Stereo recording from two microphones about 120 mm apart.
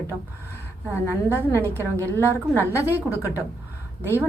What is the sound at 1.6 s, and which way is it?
Speech, 20° right (ahead or behind).